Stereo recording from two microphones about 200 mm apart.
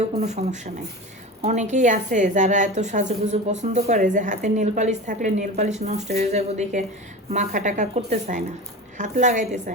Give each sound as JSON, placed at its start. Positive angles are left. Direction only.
{"t": 0.0, "sound": "a woman's voice", "side_deg": -30}